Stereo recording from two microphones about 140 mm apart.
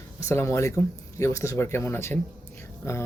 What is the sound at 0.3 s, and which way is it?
Speech, 20° left (ahead or behind).